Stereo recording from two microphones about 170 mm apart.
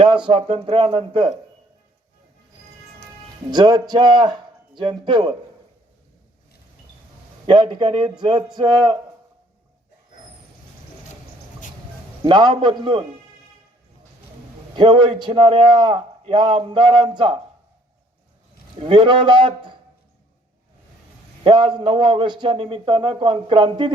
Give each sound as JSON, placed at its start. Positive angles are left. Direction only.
{"t": 0.3, "sound": "speech", "side_deg": -30}
{"t": 3.5, "sound": "a man's voice", "side_deg": -25}
{"t": 7.4, "sound": "a man's voice", "side_deg": -25}
{"t": 12.2, "sound": "a man's voice", "side_deg": -25}
{"t": 14.8, "sound": "a man's voice", "side_deg": -25}
{"t": 18.8, "sound": "a man's voice", "side_deg": -30}
{"t": 21.4, "sound": "a man's voice", "side_deg": -25}